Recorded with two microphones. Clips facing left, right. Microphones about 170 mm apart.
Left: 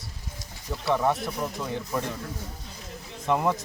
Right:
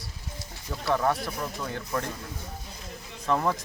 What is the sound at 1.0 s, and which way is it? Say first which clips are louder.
Speech: left 2 dB; 20° left (ahead or behind).